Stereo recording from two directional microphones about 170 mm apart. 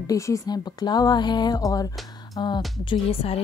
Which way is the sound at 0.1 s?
20° left (ahead or behind).